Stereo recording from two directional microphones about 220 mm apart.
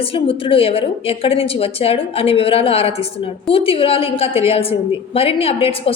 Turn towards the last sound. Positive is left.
turn(degrees=25)  # may be behind; listen again after turning